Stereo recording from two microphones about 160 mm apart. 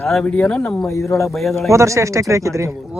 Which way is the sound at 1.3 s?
Centre (ahead or behind).